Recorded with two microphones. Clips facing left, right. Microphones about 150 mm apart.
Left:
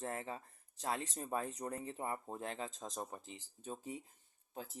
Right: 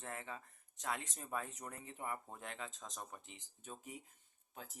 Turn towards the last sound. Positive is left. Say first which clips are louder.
# left 6 dB
turn(degrees=30)  # may be behind; listen again after turning